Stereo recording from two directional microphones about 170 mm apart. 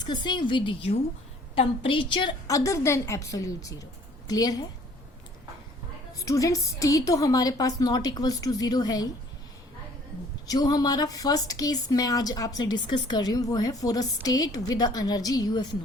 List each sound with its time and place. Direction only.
0.0 s a woman's voice: 25° left (ahead or behind)
6.1 s a woman's voice: 20° left (ahead or behind)
10.4 s a woman's voice: 20° left (ahead or behind)